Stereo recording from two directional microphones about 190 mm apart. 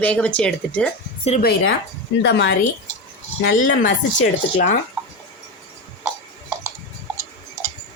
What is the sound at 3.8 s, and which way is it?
Speech, 45° left (ahead or behind).